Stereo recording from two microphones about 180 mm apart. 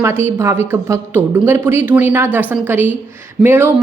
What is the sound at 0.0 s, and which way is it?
Speech, 15° right (ahead or behind).